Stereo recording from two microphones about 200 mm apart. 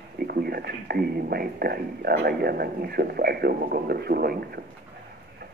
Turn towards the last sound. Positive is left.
turn(degrees=-50)  # may be behind; listen again after turning